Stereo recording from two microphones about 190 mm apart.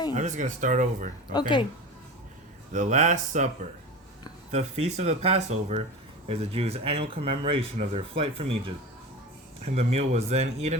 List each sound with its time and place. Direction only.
0.1 s speech: 40° right (ahead or behind)
1.3 s speech: 25° left (ahead or behind)
2.7 s speech: 40° right (ahead or behind)
4.5 s speech: 35° right (ahead or behind)
9.7 s speech: 35° right (ahead or behind)